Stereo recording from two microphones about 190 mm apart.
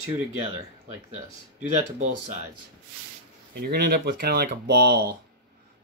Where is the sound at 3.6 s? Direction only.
55° right (ahead or behind).